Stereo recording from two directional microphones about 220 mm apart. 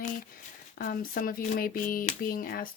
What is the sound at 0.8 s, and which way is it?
Speech, 40° left (ahead or behind).